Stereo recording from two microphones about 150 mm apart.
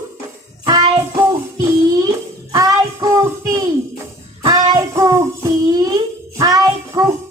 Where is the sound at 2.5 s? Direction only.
25° right (ahead or behind).